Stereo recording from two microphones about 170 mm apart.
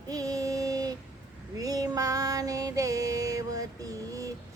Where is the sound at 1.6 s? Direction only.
20° right (ahead or behind).